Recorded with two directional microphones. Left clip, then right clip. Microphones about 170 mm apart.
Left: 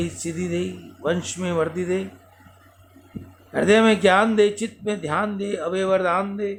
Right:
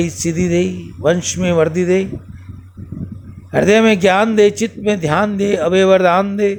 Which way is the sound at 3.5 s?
40° right (ahead or behind).